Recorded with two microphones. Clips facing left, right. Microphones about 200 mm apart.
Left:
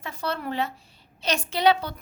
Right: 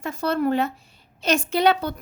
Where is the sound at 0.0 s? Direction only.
45° right (ahead or behind).